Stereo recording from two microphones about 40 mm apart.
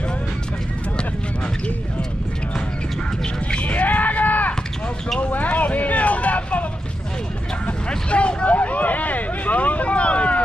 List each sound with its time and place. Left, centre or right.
3.6 s a sound: left
5.2 s vehicle: left
8.1 s vehicle: left